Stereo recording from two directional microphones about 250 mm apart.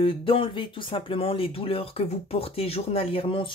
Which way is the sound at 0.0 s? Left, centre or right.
Left.